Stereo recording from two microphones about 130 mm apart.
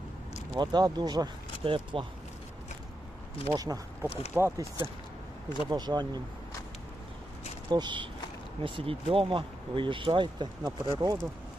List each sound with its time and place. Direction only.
0.5 s speech: 35° right (ahead or behind)
1.6 s speech: 40° right (ahead or behind)
3.5 s speech: 30° right (ahead or behind)
5.7 s speech: 30° right (ahead or behind)
7.7 s speech: 35° right (ahead or behind)